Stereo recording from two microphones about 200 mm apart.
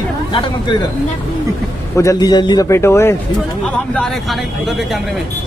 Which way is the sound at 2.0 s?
15° left (ahead or behind).